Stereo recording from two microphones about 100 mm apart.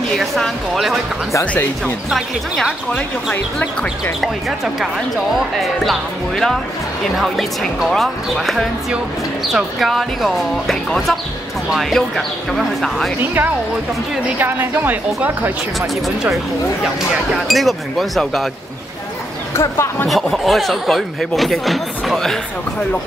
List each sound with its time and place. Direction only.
0.1 s speech: 5° left (ahead or behind)
1.4 s speech: 15° left (ahead or behind)
2.0 s speech: centre (ahead or behind)
14.4 s speech: 20° right (ahead or behind)
17.5 s speech: centre (ahead or behind)
19.5 s speech: 25° left (ahead or behind)
20.1 s speech: centre (ahead or behind)